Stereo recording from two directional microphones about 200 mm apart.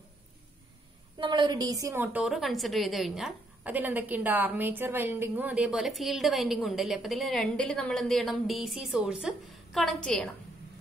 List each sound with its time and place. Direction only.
1.1 s a woman's voice: 20° right (ahead or behind); by 10.3 s 5° left (ahead or behind)